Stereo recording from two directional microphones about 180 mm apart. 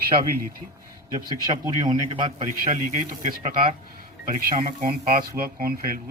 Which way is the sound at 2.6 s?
50° right (ahead or behind).